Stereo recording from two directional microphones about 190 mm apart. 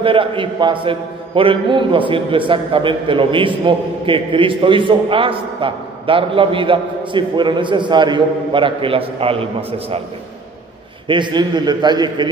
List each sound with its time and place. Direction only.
0.0 s a man's voice: 25° right (ahead or behind)
11.1 s a man's voice: 25° right (ahead or behind)